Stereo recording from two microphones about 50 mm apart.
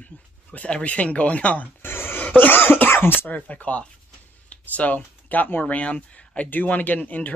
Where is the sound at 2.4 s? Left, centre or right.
Left.